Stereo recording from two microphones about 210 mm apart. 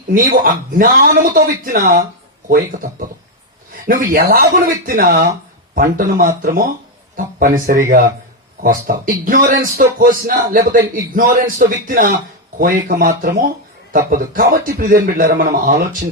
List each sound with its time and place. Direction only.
0.1 s speech: 40° right (ahead or behind)
14.1 s speech: 40° right (ahead or behind)